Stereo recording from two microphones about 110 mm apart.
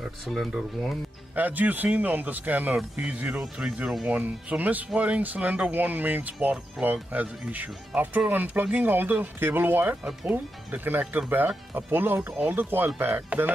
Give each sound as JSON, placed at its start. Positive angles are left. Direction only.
{"t": 0.3, "sound": "speech", "side_deg": 0}
{"t": 1.3, "sound": "speech", "side_deg": -15}